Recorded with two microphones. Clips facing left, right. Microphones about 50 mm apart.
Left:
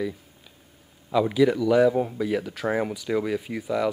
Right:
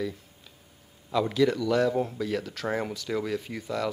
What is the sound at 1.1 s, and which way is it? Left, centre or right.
Speech, centre.